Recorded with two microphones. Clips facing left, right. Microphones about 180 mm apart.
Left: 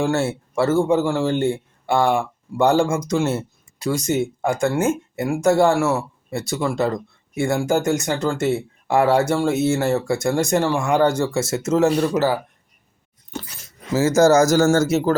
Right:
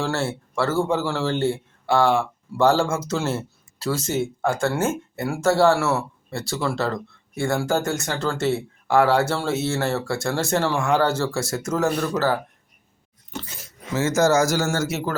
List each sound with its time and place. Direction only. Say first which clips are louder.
0.0 s speech: left 5 dB; 20° left (ahead or behind)
13.9 s speech: left 5 dB; 35° left (ahead or behind)